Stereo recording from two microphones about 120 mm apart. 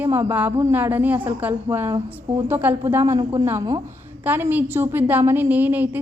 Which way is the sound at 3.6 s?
35° right (ahead or behind).